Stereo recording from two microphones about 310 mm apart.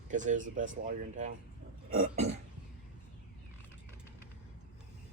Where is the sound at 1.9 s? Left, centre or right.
Right.